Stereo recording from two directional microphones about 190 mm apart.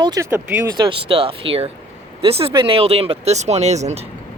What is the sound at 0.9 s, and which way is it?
Speech, 30° right (ahead or behind).